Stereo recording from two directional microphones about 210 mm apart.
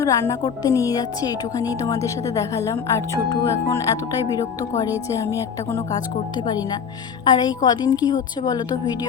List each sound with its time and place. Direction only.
0.0 s a woman's voice: 15° left (ahead or behind)